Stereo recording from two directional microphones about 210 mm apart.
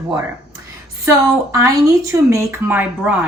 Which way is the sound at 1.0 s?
15° right (ahead or behind).